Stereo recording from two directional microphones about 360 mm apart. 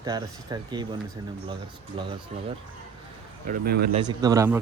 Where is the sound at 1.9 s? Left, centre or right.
Centre.